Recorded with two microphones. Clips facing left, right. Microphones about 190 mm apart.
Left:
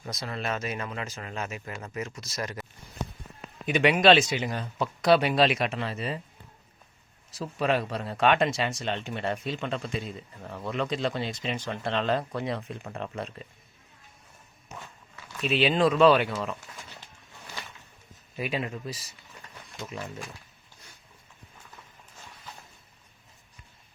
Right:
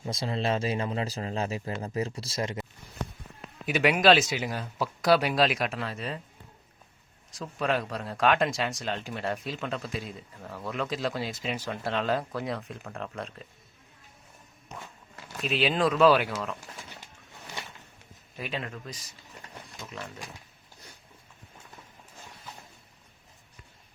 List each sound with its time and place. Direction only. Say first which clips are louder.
0.0 s speech: right 4 dB; 25° right (ahead or behind)
3.7 s speech: left 1 dB; 5° right (ahead or behind)
7.3 s speech: left 2 dB; 5° left (ahead or behind)
15.4 s speech: left 3 dB; centre (ahead or behind)
18.3 s speech: left 4 dB; 10° left (ahead or behind)